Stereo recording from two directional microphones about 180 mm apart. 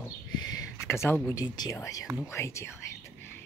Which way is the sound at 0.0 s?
20° left (ahead or behind).